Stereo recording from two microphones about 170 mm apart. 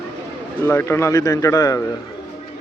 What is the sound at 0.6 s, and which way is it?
A man's voice, 15° left (ahead or behind).